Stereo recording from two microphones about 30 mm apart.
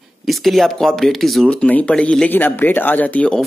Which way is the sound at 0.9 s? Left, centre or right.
Centre.